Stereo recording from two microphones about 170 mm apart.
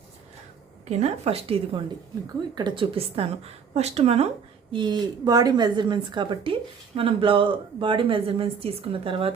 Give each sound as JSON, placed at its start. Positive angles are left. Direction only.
{"t": 0.9, "sound": "a woman's voice", "side_deg": -40}
{"t": 4.7, "sound": "speech", "side_deg": -25}